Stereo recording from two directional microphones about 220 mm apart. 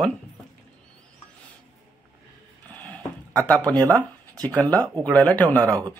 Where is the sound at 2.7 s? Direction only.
5° left (ahead or behind).